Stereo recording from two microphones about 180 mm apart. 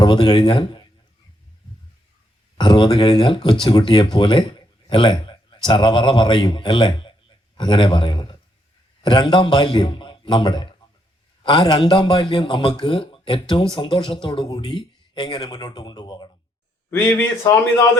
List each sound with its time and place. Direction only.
0.0 s a man's voice: 25° left (ahead or behind)
2.6 s a man's voice: 25° left (ahead or behind)
16.9 s speech: 10° left (ahead or behind)